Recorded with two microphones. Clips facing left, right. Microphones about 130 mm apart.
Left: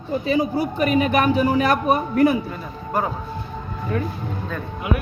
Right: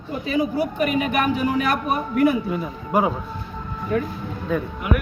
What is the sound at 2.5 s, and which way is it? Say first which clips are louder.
Speech: right 3 dB; 10° right (ahead or behind).